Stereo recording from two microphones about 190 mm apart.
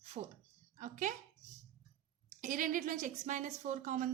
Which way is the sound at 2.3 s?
45° right (ahead or behind).